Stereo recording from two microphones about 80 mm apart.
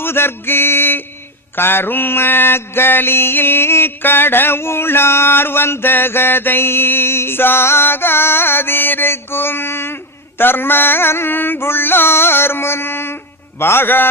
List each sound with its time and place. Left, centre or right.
0.0 s mantra: left